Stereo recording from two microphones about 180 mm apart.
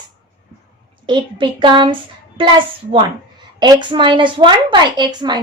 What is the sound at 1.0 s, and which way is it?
Speech, 25° right (ahead or behind).